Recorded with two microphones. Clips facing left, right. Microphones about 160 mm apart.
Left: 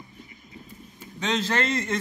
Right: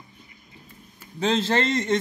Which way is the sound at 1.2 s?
30° right (ahead or behind).